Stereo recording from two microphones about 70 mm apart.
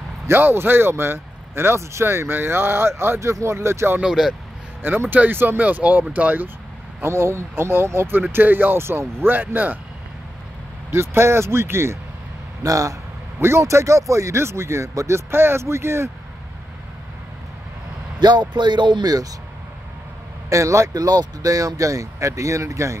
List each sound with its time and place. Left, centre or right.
0.3 s speech: right
4.0 s speech: centre
4.8 s speech: right
7.0 s speech: right
8.2 s speech: right
10.9 s speech: right
12.6 s speech: right
13.4 s speech: right
18.2 s speech: right
20.4 s speech: right